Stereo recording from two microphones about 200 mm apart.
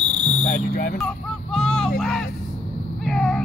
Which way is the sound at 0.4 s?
40° left (ahead or behind).